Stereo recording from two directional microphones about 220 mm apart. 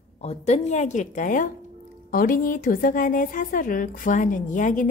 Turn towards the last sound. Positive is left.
turn(degrees=35)  # may be behind; listen again after turning